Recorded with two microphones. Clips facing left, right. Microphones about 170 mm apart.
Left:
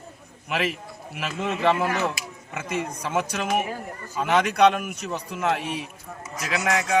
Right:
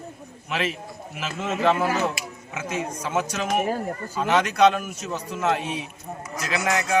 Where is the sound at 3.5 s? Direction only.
35° right (ahead or behind).